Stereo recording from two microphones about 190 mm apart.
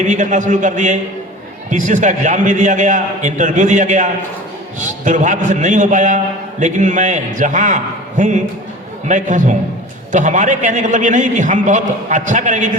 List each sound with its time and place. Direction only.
0.0 s a man's voice: 40° right (ahead or behind)